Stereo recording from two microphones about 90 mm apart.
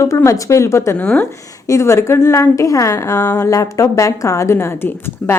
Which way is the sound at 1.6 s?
35° left (ahead or behind).